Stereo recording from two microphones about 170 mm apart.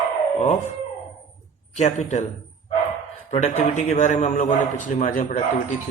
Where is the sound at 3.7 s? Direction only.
45° left (ahead or behind).